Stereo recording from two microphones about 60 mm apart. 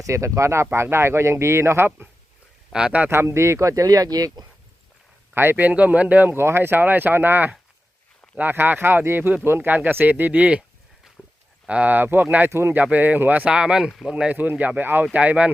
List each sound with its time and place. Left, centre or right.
0.0 s speech: right
2.7 s speech: centre
3.1 s speech: right
5.3 s speech: right
6.3 s speech: right
11.2 s walk: centre
11.7 s speech: right
12.5 s speech: right
12.7 s speech: right
13.5 s speech: centre
14.3 s speech: right